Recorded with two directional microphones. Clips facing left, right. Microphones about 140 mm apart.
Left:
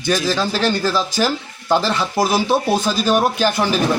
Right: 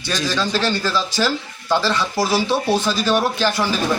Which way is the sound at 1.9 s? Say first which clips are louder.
Left 2 dB; 15° left (ahead or behind).